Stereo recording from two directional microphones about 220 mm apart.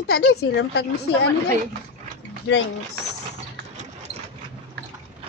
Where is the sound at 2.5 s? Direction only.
55° left (ahead or behind).